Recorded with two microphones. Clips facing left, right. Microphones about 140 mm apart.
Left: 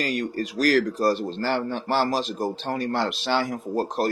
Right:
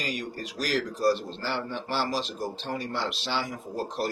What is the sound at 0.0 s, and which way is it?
Speech, 55° left (ahead or behind).